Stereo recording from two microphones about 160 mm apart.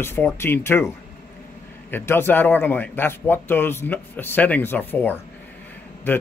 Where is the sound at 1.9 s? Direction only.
15° left (ahead or behind).